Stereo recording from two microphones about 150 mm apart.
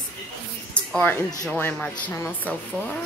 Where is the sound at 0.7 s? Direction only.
10° left (ahead or behind).